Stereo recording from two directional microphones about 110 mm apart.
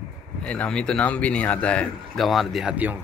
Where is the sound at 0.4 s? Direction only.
10° left (ahead or behind).